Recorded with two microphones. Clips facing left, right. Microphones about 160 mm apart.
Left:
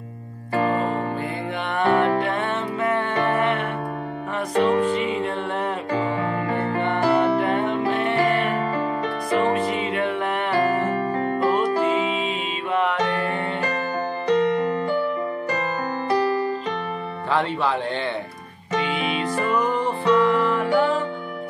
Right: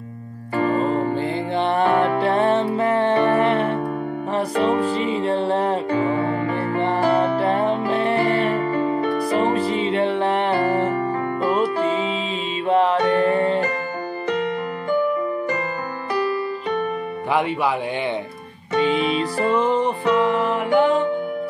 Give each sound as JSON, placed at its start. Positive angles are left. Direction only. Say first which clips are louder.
{"t": 0.7, "sound": "music", "louder": "right 4 dB", "side_deg": -35}
{"t": 12.6, "sound": "music", "louder": "right 5 dB", "side_deg": -35}
{"t": 17.3, "sound": "speech", "louder": "right 2 dB", "side_deg": -15}
{"t": 18.8, "sound": "music", "louder": "right 5 dB", "side_deg": -35}